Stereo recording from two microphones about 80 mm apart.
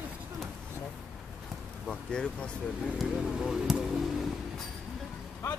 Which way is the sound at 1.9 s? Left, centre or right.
Centre.